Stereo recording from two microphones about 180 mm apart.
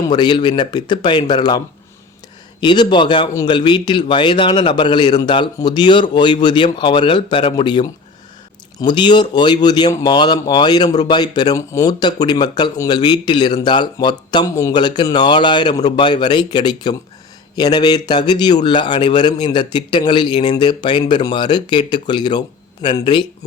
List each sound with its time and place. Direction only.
0.0 s speech: 25° left (ahead or behind)